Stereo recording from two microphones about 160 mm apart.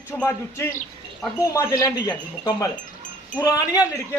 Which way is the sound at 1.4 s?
20° left (ahead or behind).